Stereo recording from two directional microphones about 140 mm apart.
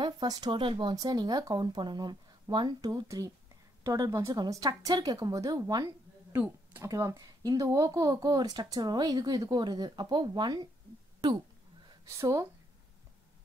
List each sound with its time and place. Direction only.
0.0 s speech: 30° right (ahead or behind)
6.3 s speech: 15° right (ahead or behind)
6.9 s speech: 25° right (ahead or behind)